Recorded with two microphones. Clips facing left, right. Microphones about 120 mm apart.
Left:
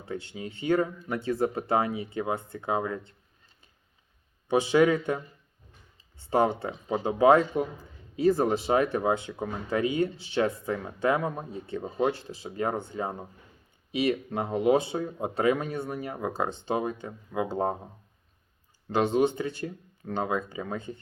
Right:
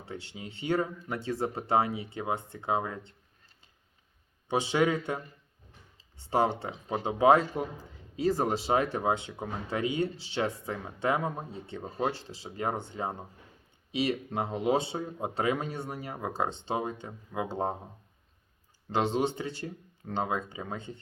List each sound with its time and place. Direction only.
0.1 s speech: 30° right (ahead or behind)
4.4 s speech: 30° right (ahead or behind)
6.3 s speech: 30° right (ahead or behind)
13.9 s speech: 35° right (ahead or behind)
18.9 s speech: 30° right (ahead or behind)